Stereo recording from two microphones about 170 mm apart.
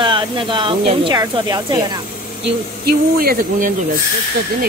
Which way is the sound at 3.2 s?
60° right (ahead or behind).